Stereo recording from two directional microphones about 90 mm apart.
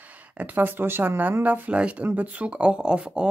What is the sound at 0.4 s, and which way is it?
Speech, 20° right (ahead or behind).